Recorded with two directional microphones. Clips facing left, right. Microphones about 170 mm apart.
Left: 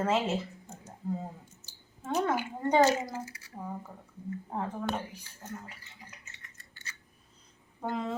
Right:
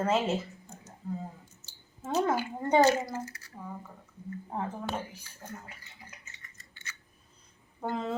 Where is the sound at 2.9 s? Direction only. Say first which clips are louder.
Right 2 dB; 10° left (ahead or behind).